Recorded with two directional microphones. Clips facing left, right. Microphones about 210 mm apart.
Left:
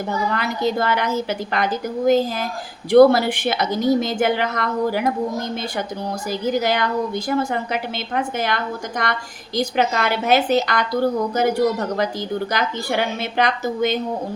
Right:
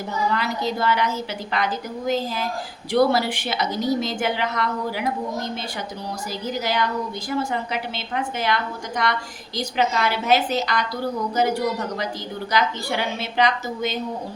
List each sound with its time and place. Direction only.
0.3 s a woman's voice: 55° left (ahead or behind)
6.6 s a woman's voice: 55° left (ahead or behind)
12.5 s a woman's voice: 50° left (ahead or behind)